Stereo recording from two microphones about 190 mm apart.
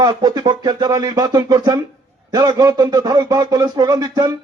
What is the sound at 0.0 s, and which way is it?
A man's voice, 20° right (ahead or behind).